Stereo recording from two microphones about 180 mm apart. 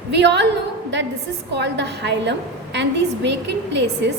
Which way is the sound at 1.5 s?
75° right (ahead or behind).